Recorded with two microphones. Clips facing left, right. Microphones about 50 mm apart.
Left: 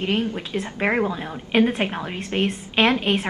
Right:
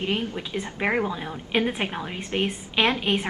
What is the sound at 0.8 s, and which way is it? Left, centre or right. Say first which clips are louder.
A woman's voice: left 3 dB; centre.